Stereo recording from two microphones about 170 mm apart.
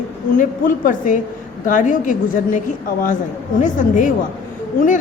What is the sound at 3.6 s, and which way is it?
Speech, 50° left (ahead or behind).